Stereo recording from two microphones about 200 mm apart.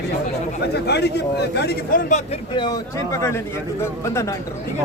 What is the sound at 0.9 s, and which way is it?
A man's voice, 55° left (ahead or behind).